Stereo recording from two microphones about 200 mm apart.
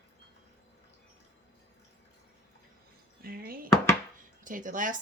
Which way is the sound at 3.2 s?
50° right (ahead or behind).